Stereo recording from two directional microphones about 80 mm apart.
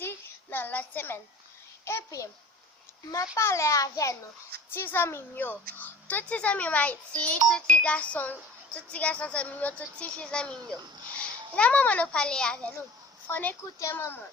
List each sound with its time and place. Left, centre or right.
0.0 s child singing: left
1.8 s a child's voice: left
3.3 s a child's voice: left
4.7 s a child's voice: left; by 12.7 s centre
13.2 s speech: left